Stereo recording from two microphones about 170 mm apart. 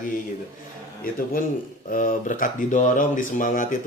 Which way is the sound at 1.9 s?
50° left (ahead or behind).